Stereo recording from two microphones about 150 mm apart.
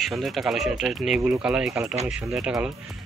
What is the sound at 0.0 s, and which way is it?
A man's voice, centre (ahead or behind).